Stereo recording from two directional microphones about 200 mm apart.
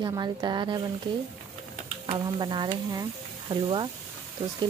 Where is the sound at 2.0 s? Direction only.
25° right (ahead or behind).